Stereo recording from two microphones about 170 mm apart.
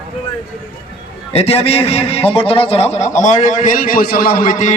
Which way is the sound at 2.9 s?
45° left (ahead or behind).